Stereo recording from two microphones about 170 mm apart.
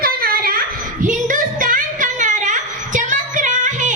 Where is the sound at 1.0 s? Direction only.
50° right (ahead or behind).